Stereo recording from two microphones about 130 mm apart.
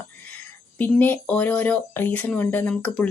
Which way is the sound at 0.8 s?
15° left (ahead or behind).